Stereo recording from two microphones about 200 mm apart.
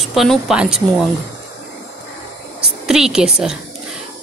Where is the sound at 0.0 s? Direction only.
Centre (ahead or behind).